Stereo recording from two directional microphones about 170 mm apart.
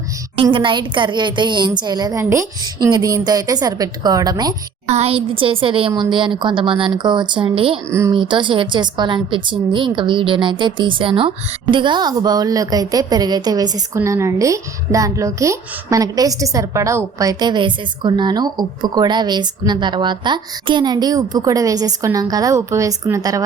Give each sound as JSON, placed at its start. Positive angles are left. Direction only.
{"t": 0.4, "sound": "a woman's voice", "side_deg": -30}
{"t": 4.9, "sound": "a woman's voice", "side_deg": -40}
{"t": 7.9, "sound": "speech", "side_deg": -15}
{"t": 8.1, "sound": "a woman's voice", "side_deg": -30}